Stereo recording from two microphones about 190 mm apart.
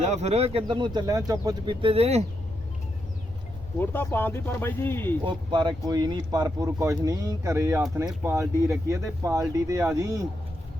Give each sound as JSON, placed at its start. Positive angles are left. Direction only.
{"t": 0.0, "sound": "speech", "side_deg": -35}
{"t": 3.8, "sound": "speech", "side_deg": 10}
{"t": 5.2, "sound": "speech", "side_deg": -25}